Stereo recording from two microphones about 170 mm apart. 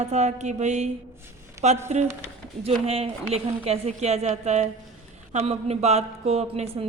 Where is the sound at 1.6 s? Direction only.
15° right (ahead or behind).